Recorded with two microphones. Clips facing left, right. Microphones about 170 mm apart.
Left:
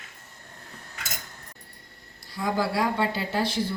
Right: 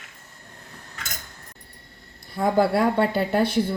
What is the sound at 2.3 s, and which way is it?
A woman's voice, 55° right (ahead or behind).